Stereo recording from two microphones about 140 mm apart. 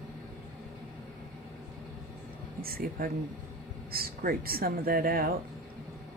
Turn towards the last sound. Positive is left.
turn(degrees=-90)